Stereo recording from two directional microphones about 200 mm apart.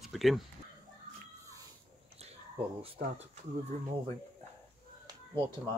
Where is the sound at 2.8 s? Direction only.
30° right (ahead or behind).